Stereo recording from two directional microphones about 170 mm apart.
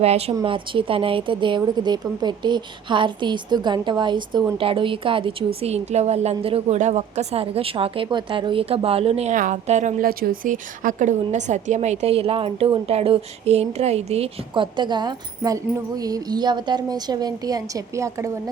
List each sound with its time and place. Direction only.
0.0 s a woman's voice: 35° right (ahead or behind); by 18.3 s 20° right (ahead or behind)